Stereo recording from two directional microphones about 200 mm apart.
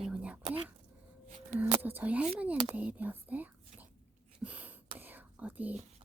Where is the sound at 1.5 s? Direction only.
10° right (ahead or behind).